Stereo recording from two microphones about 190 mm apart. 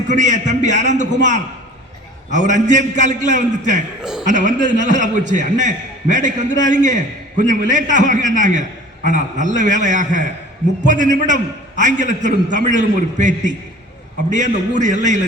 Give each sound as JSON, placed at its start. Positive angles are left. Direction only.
{"t": 0.1, "sound": "a man's voice", "side_deg": -40}